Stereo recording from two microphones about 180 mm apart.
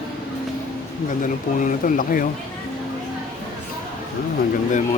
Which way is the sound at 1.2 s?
45° left (ahead or behind).